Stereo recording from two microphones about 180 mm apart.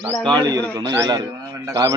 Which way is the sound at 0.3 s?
20° right (ahead or behind).